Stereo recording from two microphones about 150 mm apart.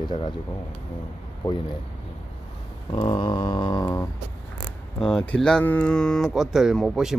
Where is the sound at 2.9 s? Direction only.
30° left (ahead or behind).